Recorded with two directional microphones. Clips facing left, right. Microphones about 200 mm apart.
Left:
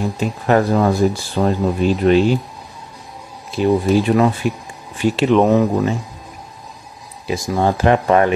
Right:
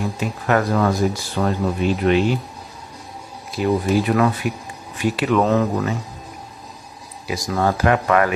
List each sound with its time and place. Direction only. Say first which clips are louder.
0.2 s speech: left 4 dB; 30° left (ahead or behind)
3.5 s speech: left 4 dB; 30° left (ahead or behind)
7.2 s speech: left 3 dB; 25° left (ahead or behind)